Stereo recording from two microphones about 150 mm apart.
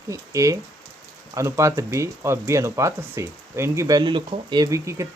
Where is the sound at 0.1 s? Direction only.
20° right (ahead or behind).